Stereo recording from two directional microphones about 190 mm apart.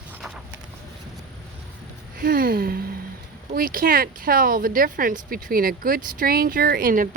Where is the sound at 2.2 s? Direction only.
50° right (ahead or behind).